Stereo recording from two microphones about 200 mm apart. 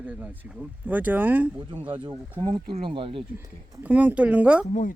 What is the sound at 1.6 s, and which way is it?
Speech, 25° right (ahead or behind).